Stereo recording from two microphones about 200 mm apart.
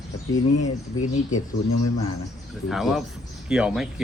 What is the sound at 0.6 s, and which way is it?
Speech, 40° left (ahead or behind).